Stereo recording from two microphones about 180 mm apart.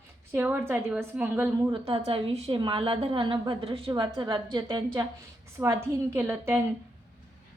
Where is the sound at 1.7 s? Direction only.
30° right (ahead or behind).